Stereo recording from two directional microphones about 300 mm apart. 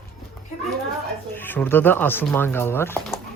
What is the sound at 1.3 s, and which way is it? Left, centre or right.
Speech, centre.